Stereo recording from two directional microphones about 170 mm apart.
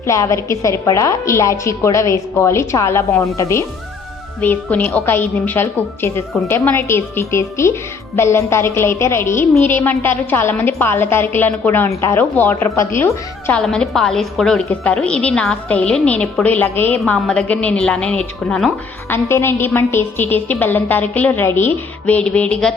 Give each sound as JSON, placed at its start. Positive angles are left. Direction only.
{"t": 0.1, "sound": "a woman's voice", "side_deg": 20}
{"t": 13.6, "sound": "a woman's voice", "side_deg": 0}
{"t": 19.1, "sound": "a woman's voice", "side_deg": 15}